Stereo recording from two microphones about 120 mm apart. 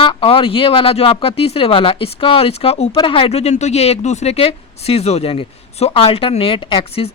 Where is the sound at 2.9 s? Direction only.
45° left (ahead or behind).